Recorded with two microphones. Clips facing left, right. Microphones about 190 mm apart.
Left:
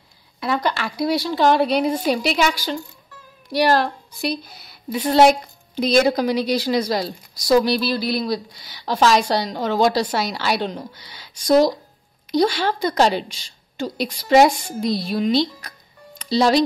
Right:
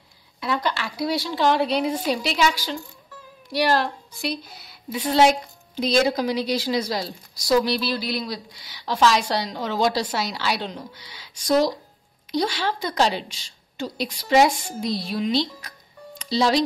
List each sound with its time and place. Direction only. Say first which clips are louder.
0.4 s a woman's voice: left 3 dB; 45° left (ahead or behind)
4.9 s a woman's voice: left 4 dB; 60° left (ahead or behind)